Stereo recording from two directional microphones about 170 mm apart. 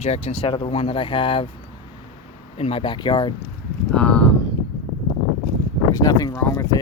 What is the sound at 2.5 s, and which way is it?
Speech, 35° left (ahead or behind).